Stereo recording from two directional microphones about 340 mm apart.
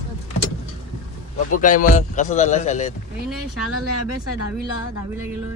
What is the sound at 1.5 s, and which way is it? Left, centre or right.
Speech, left.